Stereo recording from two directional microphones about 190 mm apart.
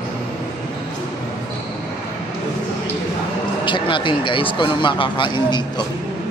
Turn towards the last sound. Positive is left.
turn(degrees=25)  # may be behind; listen again after turning